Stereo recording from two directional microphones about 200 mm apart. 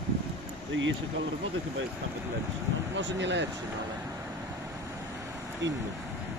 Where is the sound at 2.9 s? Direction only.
60° right (ahead or behind).